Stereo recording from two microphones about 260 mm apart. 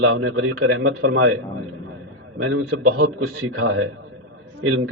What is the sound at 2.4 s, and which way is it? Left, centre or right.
A man's voice, right.